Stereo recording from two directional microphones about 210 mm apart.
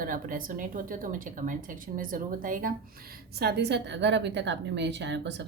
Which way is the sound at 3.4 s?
50° right (ahead or behind).